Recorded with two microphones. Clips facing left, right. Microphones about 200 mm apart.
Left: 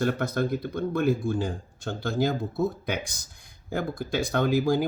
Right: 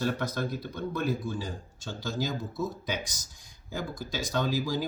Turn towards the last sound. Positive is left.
turn(degrees=55)  # may be behind; listen again after turning